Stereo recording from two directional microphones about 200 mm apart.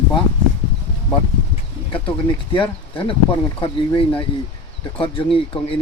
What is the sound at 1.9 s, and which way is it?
Speech, 25° left (ahead or behind).